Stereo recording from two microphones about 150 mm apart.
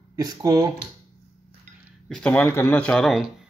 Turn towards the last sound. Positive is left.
turn(degrees=0)  # may be behind; listen again after turning